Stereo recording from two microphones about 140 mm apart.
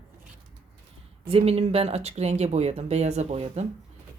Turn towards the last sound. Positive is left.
turn(degrees=-50)  # may be behind; listen again after turning